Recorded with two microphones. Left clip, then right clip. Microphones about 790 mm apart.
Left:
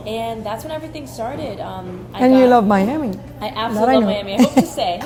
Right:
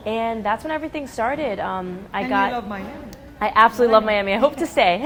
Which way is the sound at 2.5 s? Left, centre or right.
Left.